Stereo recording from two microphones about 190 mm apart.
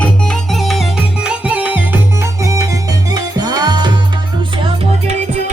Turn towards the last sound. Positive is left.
turn(degrees=-40)  # may be behind; listen again after turning